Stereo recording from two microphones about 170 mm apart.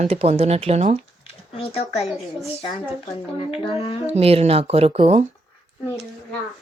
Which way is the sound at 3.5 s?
35° left (ahead or behind).